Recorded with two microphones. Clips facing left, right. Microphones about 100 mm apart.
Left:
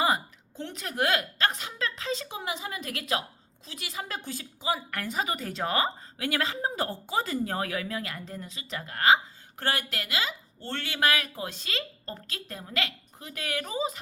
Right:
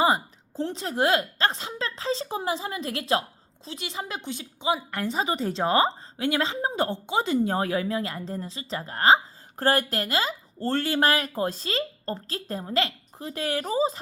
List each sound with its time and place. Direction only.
0.0 s speech: 30° right (ahead or behind)